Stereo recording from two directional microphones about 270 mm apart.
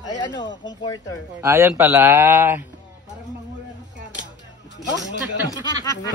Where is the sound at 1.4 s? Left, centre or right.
Centre.